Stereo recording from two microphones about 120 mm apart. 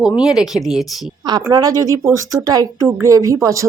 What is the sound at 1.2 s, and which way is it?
Speech, 40° right (ahead or behind).